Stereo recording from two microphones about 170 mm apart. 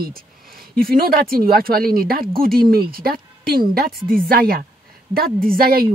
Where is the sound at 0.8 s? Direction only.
60° right (ahead or behind).